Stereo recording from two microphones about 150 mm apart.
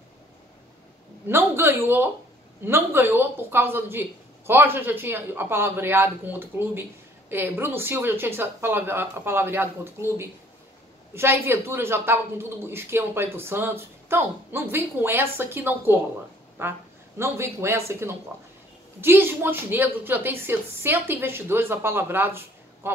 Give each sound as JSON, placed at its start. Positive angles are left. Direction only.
{"t": 1.2, "sound": "speech", "side_deg": -15}
{"t": 11.1, "sound": "speech", "side_deg": -15}